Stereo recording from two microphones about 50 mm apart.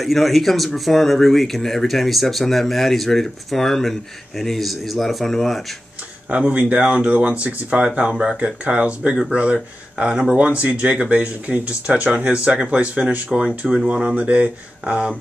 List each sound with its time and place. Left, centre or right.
0.0 s speech: centre
6.3 s speech: right